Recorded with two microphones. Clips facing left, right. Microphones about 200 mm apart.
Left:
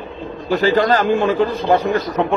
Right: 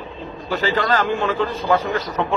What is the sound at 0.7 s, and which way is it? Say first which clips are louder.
Speech: left 4 dB; 40° left (ahead or behind).